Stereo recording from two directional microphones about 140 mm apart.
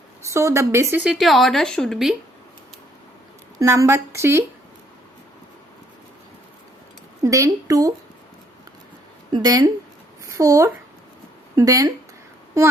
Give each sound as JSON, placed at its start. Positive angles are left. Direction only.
{"t": 0.3, "sound": "a woman's voice", "side_deg": -20}
{"t": 1.0, "sound": "speech", "side_deg": 0}
{"t": 3.6, "sound": "a woman's voice", "side_deg": -20}
{"t": 7.2, "sound": "a woman's voice", "side_deg": -25}
{"t": 9.3, "sound": "a woman's voice", "side_deg": -30}